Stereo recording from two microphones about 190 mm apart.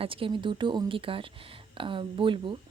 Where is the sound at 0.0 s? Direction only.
30° right (ahead or behind).